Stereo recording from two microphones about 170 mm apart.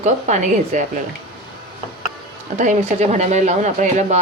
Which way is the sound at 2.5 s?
45° right (ahead or behind).